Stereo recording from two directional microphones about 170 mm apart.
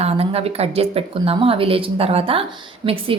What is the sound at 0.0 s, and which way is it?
A woman's voice, 35° right (ahead or behind).